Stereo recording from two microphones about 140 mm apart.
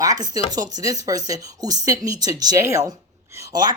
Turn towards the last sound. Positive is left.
turn(degrees=-30)  # may be behind; listen again after turning